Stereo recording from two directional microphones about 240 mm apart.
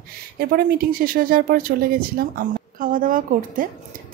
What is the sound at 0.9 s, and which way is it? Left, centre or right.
Speech, right.